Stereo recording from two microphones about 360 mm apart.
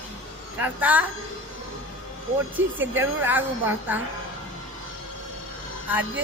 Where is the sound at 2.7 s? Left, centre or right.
Right.